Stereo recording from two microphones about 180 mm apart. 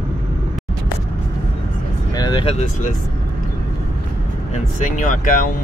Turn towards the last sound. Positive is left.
turn(degrees=45)  # may be behind; listen again after turning